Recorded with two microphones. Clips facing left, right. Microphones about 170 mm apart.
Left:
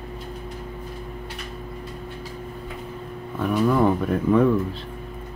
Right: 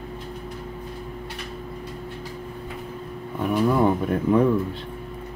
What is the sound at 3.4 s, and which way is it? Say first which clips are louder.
Speech: even; 15° right (ahead or behind).